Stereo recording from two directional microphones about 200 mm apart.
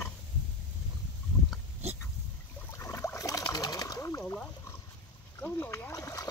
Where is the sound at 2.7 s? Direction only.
15° left (ahead or behind).